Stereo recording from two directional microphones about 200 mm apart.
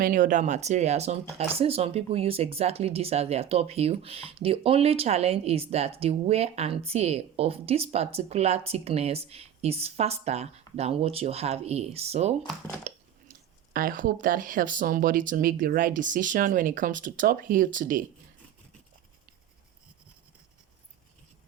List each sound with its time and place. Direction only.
0.0 s speech: 40° right (ahead or behind)
12.9 s a sound: 35° right (ahead or behind)
13.7 s speech: 45° right (ahead or behind)